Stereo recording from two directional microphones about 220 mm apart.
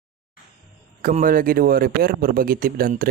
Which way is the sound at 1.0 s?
35° right (ahead or behind).